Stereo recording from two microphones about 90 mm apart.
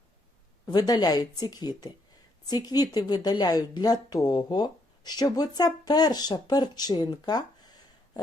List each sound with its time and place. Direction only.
0.7 s a woman's voice: 50° left (ahead or behind)